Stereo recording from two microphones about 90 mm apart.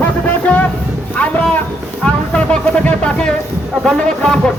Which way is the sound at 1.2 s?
20° left (ahead or behind).